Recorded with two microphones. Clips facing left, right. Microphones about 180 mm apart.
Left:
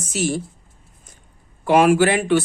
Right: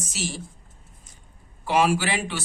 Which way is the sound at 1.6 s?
55° left (ahead or behind).